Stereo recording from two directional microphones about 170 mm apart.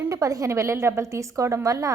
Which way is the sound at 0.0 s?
20° right (ahead or behind).